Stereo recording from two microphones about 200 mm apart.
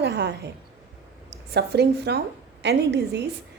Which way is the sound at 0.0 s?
60° right (ahead or behind).